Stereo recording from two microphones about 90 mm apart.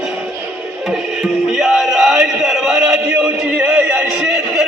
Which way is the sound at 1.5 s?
5° right (ahead or behind).